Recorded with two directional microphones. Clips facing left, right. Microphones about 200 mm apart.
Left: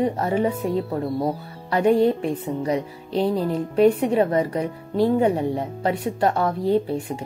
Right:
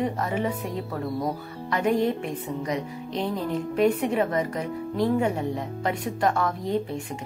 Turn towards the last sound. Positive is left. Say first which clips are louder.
# left 6 dB
turn(degrees=35)  # may be behind; listen again after turning